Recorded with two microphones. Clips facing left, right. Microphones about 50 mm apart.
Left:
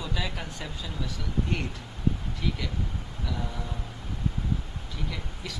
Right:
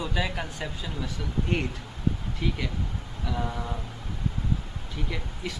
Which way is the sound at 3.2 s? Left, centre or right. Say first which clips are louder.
Right 4 dB; right.